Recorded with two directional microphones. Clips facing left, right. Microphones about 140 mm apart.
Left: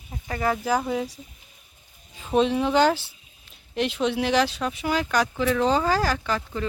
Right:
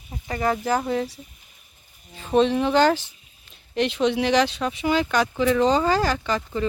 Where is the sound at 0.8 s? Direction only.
5° left (ahead or behind).